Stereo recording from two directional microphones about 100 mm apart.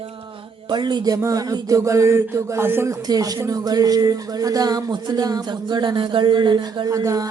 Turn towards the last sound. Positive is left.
turn(degrees=-35)  # may be behind; listen again after turning